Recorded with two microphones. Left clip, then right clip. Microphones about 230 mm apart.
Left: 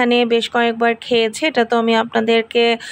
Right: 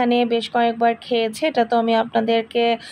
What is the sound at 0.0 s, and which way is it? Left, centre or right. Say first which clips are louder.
Speech: left 4 dB; left.